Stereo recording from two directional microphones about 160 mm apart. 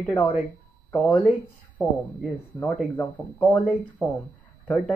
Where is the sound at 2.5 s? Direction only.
15° left (ahead or behind).